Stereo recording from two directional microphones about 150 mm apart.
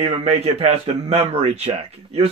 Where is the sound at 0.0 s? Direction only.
45° right (ahead or behind).